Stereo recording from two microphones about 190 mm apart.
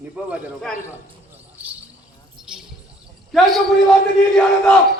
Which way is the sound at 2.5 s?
5° right (ahead or behind).